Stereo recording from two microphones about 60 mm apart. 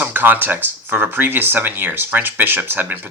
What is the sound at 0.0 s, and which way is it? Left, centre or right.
Speech, right.